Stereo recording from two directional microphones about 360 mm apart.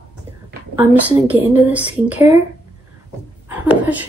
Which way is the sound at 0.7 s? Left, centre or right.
Centre.